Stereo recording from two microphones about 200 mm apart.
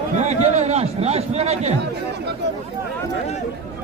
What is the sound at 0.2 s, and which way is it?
A man's voice, 35° right (ahead or behind).